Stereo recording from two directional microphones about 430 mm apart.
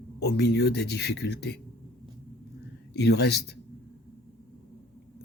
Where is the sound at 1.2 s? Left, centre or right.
Left.